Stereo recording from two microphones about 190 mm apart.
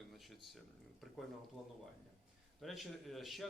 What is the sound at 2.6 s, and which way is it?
Speech, centre (ahead or behind).